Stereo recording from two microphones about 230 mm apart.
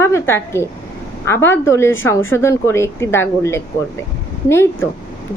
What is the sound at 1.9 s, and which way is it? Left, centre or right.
Speech, left.